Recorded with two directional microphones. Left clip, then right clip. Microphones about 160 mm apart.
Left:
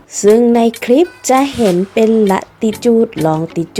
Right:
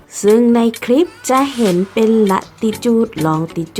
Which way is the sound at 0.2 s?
10° left (ahead or behind).